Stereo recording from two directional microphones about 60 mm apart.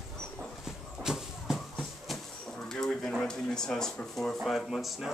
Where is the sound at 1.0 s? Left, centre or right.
Centre.